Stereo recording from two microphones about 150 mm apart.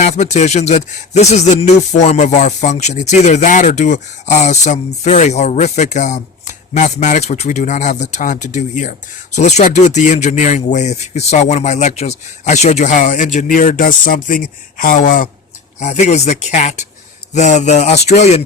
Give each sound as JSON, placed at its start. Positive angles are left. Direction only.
{"t": 0.0, "sound": "speech", "side_deg": 50}
{"t": 15.8, "sound": "speech", "side_deg": 50}